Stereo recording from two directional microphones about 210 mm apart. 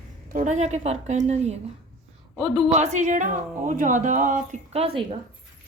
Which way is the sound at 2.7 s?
35° right (ahead or behind).